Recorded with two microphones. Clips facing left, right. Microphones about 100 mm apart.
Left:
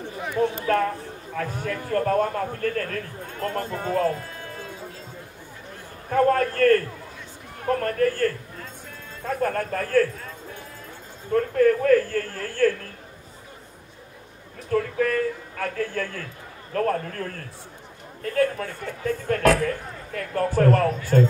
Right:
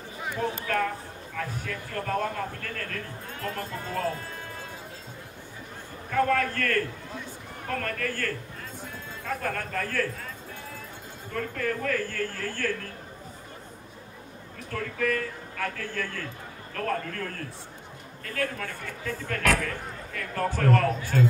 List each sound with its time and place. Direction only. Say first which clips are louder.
1.3 s a woman's voice: left 6 dB; 45° left (ahead or behind)
6.0 s speech: left 5 dB; 40° left (ahead or behind)
11.3 s a woman's voice: left 11 dB; 40° left (ahead or behind)
14.7 s speech: left 6 dB; 40° left (ahead or behind)